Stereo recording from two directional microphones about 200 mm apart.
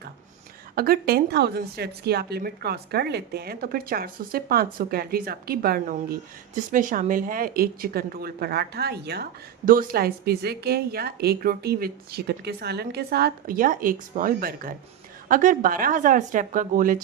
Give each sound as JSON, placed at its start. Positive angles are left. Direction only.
{"t": 0.8, "sound": "a woman's voice", "side_deg": -50}